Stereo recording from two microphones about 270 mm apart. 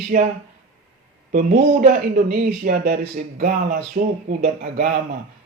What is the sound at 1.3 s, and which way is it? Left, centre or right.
Speech, right.